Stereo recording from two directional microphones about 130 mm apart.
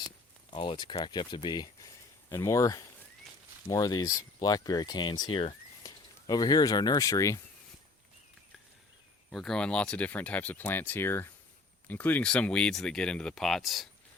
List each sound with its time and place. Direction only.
0.5 s speech: 40° left (ahead or behind)
6.2 s speech: 30° left (ahead or behind)
9.3 s speech: 5° left (ahead or behind)